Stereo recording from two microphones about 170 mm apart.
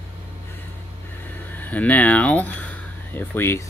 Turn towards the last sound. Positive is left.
turn(degrees=15)  # may be behind; listen again after turning